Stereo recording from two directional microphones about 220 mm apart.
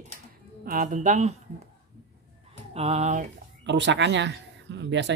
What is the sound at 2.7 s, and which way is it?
Speech, 30° right (ahead or behind).